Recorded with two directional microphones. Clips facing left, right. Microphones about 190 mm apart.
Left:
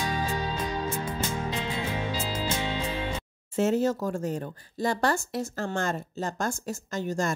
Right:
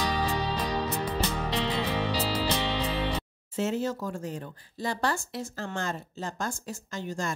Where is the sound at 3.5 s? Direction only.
45° left (ahead or behind).